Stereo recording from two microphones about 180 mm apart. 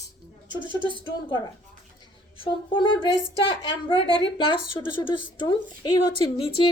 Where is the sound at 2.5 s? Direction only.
25° left (ahead or behind).